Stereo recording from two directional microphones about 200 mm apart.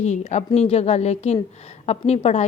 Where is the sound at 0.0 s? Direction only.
35° left (ahead or behind).